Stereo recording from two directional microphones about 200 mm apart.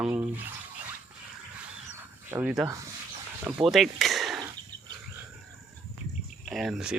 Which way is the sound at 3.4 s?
5° right (ahead or behind).